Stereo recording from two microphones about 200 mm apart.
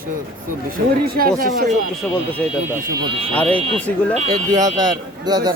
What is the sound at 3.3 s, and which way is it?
Speech, 5° left (ahead or behind).